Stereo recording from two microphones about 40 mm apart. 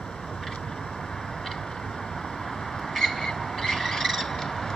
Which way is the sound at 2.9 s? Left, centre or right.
Centre.